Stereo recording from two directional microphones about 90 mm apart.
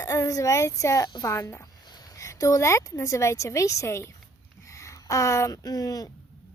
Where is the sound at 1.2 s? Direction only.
25° left (ahead or behind).